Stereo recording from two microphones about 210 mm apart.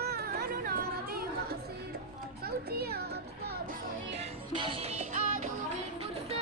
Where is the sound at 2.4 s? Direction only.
50° right (ahead or behind).